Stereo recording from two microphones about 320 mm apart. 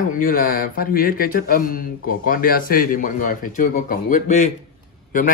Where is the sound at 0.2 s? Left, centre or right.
Left.